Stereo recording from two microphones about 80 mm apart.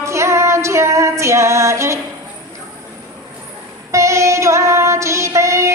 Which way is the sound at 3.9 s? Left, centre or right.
Right.